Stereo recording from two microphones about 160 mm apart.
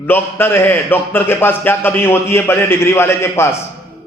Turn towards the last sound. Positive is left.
turn(degrees=15)  # may be behind; listen again after turning